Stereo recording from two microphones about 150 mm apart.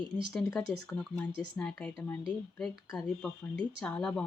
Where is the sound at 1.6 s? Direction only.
5° left (ahead or behind).